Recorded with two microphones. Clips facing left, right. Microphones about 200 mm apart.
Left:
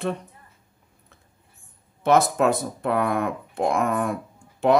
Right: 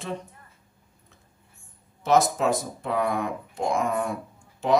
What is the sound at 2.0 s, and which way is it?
Speech, 60° left (ahead or behind).